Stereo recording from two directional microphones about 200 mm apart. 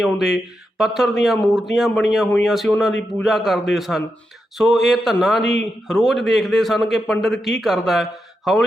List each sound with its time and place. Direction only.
0.0 s a man's voice: centre (ahead or behind)